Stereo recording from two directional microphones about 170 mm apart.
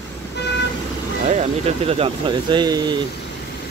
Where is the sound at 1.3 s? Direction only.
35° right (ahead or behind).